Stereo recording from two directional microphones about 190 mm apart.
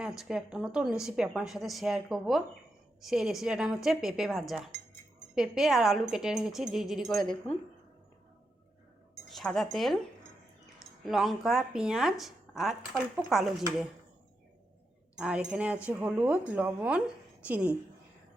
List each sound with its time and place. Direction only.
0.0 s speech: 5° right (ahead or behind)
9.3 s speech: centre (ahead or behind)
11.0 s speech: centre (ahead or behind)
15.1 s a woman's voice: 5° right (ahead or behind)